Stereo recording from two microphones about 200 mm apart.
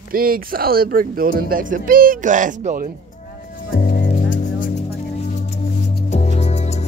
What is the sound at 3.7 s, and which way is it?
Music, 45° left (ahead or behind).